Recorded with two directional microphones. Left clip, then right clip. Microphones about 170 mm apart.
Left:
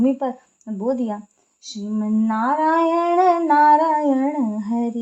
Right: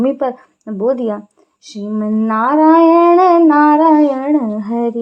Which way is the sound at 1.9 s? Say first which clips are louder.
Right 6 dB; 25° right (ahead or behind).